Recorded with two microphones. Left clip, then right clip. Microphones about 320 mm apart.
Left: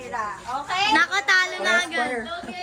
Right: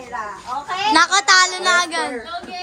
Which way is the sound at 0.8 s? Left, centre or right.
Centre.